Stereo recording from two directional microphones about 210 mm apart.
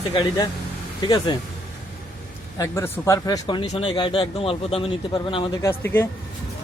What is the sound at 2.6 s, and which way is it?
Speech, 10° left (ahead or behind).